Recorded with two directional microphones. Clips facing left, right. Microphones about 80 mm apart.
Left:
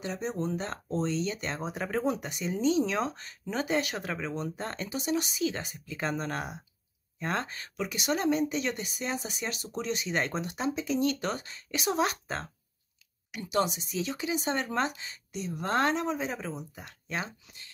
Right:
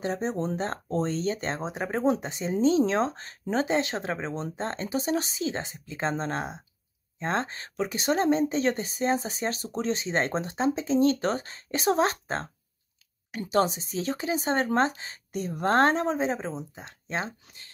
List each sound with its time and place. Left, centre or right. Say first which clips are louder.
0.0 s speech: right 4 dB; right